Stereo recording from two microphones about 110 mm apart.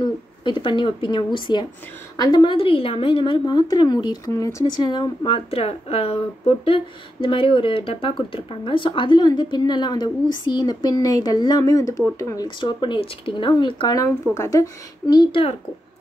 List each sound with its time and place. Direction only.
0.0 s a woman's voice: 50° left (ahead or behind)
2.5 s speech: 55° left (ahead or behind); by 4.2 s 40° left (ahead or behind)
4.3 s speech: 25° left (ahead or behind)
4.7 s speech: 40° left (ahead or behind)
12.4 s speech: 45° left (ahead or behind)
13.9 s speech: 25° left (ahead or behind)